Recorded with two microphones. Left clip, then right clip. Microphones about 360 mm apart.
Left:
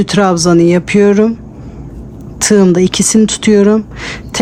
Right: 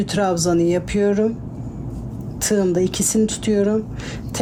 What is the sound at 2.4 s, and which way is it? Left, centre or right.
Speech, left.